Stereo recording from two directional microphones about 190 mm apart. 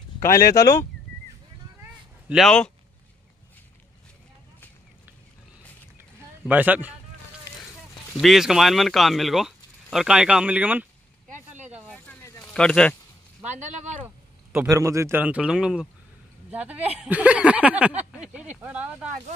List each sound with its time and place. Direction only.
0.2 s speech: 15° left (ahead or behind)
2.2 s speech: centre (ahead or behind)
6.4 s speech: 10° right (ahead or behind)
8.2 s speech: centre (ahead or behind)
11.2 s vehicle: 40° right (ahead or behind)
11.9 s a sound: 10° left (ahead or behind)
13.4 s speech: 40° right (ahead or behind)
14.0 s a man's voice: 10° right (ahead or behind)